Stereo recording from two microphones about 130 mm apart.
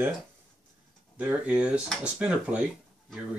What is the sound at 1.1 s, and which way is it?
Speech, 10° right (ahead or behind).